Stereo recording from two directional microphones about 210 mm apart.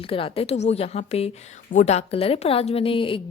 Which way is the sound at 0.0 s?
25° left (ahead or behind).